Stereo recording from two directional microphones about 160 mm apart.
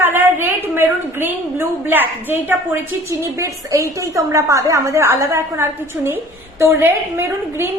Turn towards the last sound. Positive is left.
turn(degrees=-15)  # may be behind; listen again after turning